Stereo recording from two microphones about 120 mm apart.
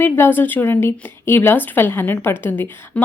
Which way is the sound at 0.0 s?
20° left (ahead or behind).